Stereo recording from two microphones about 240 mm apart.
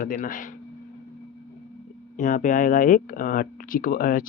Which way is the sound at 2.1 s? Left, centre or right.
Left.